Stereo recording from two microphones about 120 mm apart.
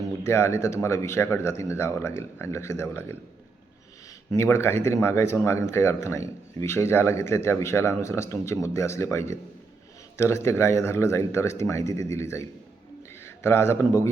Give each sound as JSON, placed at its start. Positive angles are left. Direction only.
{"t": 0.3, "sound": "a man's voice", "side_deg": 20}
{"t": 4.3, "sound": "a man's voice", "side_deg": 20}